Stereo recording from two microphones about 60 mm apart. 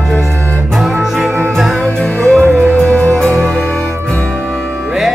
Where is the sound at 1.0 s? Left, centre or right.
Centre.